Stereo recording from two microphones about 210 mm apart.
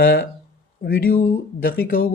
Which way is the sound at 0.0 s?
50° left (ahead or behind).